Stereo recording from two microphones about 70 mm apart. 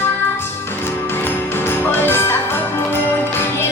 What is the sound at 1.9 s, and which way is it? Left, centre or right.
Music, left.